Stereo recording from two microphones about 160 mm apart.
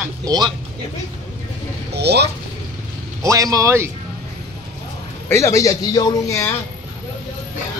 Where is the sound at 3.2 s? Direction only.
20° right (ahead or behind).